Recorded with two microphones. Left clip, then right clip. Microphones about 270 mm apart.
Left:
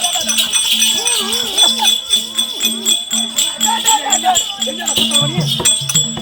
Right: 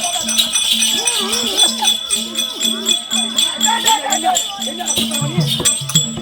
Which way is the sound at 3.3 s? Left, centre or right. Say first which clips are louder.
Right 1 dB; left.